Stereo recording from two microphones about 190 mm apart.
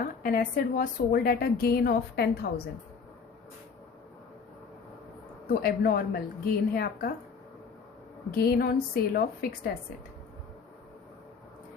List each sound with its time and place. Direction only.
0.0 s a woman's voice: 50° left (ahead or behind)
5.5 s a woman's voice: 50° left (ahead or behind)
8.4 s a woman's voice: 55° left (ahead or behind)